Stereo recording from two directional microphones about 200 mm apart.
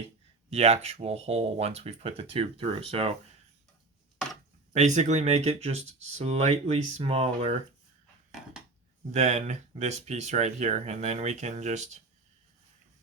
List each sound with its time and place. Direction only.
0.5 s speech: 35° right (ahead or behind)
4.7 s speech: 35° right (ahead or behind)
9.1 s speech: 35° right (ahead or behind)